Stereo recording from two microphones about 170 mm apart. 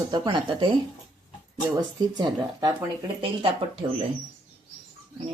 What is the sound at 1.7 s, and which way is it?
Speech, 25° right (ahead or behind).